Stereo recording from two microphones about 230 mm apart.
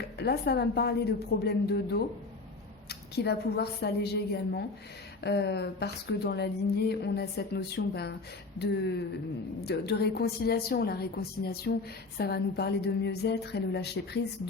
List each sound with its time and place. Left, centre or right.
0.2 s a woman's voice: left